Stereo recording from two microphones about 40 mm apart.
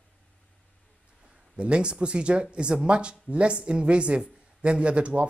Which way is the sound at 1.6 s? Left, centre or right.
Right.